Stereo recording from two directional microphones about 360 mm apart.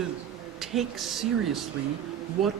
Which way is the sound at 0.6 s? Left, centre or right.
Centre.